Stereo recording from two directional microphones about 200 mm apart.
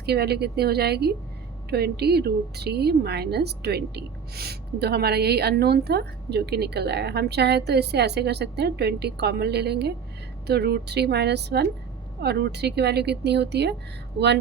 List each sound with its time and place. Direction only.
0.0 s speech: 55° right (ahead or behind)